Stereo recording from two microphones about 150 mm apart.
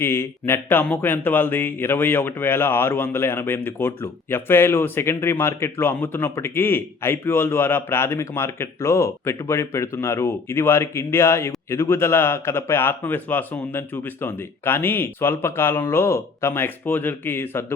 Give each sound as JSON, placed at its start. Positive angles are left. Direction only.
{"t": 0.0, "sound": "speech", "side_deg": 15}